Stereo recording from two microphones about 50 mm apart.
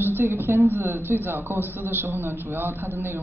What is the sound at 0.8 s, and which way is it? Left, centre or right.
A man's voice, right.